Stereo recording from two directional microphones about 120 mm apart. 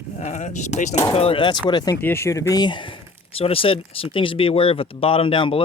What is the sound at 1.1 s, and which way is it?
Speech, 50° left (ahead or behind).